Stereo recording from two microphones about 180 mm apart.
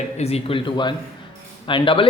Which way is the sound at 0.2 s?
35° left (ahead or behind).